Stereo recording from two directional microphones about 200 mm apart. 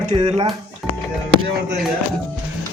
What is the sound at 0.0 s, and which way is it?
Speech, 35° right (ahead or behind).